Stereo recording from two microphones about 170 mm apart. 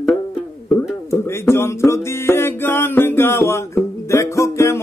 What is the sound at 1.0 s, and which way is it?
Music, 15° left (ahead or behind).